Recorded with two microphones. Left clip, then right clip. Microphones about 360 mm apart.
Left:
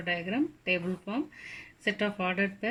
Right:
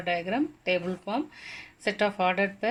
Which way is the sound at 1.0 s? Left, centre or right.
Centre.